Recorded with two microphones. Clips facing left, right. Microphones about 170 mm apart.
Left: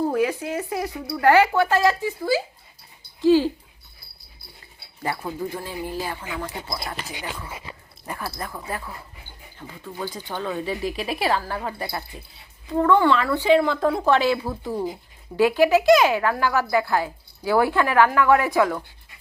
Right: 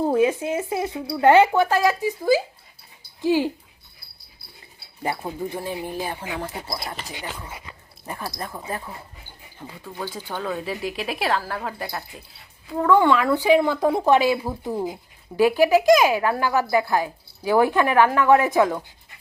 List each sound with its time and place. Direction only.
0.1 s a woman's voice: 20° right (ahead or behind)
5.0 s a woman's voice: 25° right (ahead or behind)
6.7 s speech: centre (ahead or behind)
7.1 s speech: 15° left (ahead or behind)
7.5 s speech: 25° left (ahead or behind)
8.0 s a woman's voice: 15° right (ahead or behind)
9.8 s a woman's voice: 5° right (ahead or behind)
13.0 s a woman's voice: 15° right (ahead or behind)